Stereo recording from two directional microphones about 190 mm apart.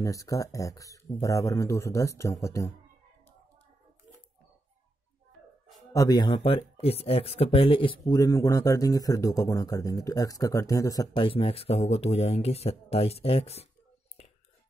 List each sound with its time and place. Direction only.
0.0 s speech: 15° left (ahead or behind)
5.9 s a man's voice: 20° left (ahead or behind)